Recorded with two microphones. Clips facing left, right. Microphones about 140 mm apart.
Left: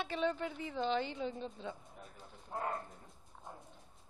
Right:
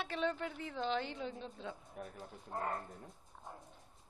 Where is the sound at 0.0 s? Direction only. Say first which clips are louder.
Left 2 dB; centre (ahead or behind).